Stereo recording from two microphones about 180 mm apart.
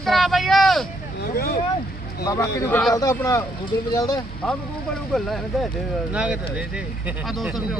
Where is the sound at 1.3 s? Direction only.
60° left (ahead or behind).